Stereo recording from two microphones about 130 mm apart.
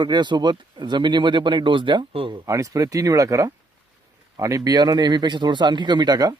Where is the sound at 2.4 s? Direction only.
25° right (ahead or behind).